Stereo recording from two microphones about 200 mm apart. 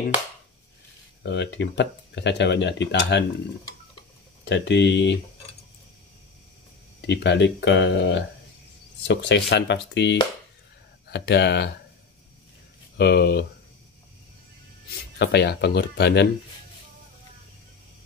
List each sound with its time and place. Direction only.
1.2 s speech: 65° left (ahead or behind)
4.5 s speech: 60° left (ahead or behind)
7.0 s speech: 60° left (ahead or behind)
12.9 s speech: 55° left (ahead or behind)
15.1 s speech: 55° left (ahead or behind)